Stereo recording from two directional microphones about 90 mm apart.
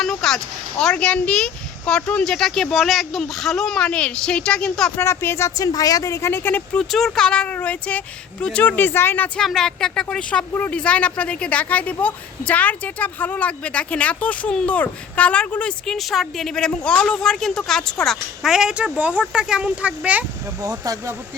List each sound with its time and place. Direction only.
0.0 s speech: 5° left (ahead or behind)
4.9 s speech: 25° left (ahead or behind)
5.5 s a woman's voice: 40° left (ahead or behind); by 6.6 s 25° left (ahead or behind)
6.7 s speech: 5° left (ahead or behind); by 9.3 s 25° left (ahead or behind)
9.4 s speech: 5° left (ahead or behind)
16.0 s speech: centre (ahead or behind)
20.6 s speech: 40° right (ahead or behind)